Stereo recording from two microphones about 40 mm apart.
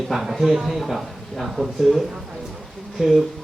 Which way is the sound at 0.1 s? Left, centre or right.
Centre.